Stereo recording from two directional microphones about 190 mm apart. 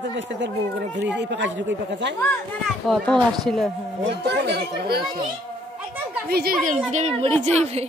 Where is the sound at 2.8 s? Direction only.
Centre (ahead or behind).